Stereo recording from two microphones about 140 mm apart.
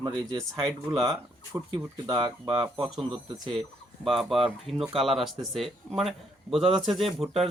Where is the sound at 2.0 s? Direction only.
30° right (ahead or behind).